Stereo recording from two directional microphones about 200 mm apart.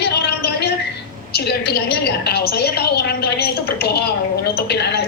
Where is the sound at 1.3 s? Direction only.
55° left (ahead or behind).